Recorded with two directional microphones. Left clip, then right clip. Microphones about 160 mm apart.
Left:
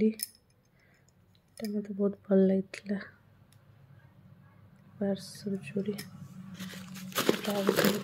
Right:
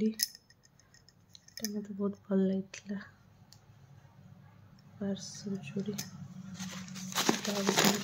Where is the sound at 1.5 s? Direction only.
20° left (ahead or behind).